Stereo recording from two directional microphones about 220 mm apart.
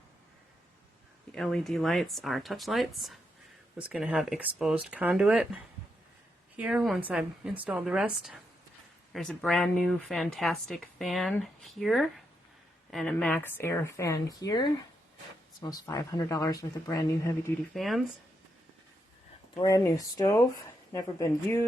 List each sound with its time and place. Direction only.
1.3 s speech: 5° left (ahead or behind)
6.6 s speech: 5° right (ahead or behind); by 17.5 s 15° left (ahead or behind)
17.7 s speech: centre (ahead or behind)
19.5 s speech: 15° left (ahead or behind)